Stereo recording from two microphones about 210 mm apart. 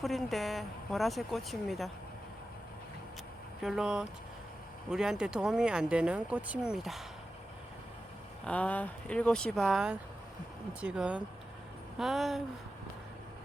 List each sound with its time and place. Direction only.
0.0 s speech: centre (ahead or behind)
3.6 s speech: centre (ahead or behind)
8.4 s speech: 5° left (ahead or behind)